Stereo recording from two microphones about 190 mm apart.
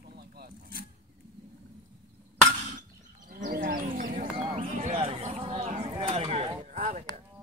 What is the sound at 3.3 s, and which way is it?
Roaring cats, 45° right (ahead or behind).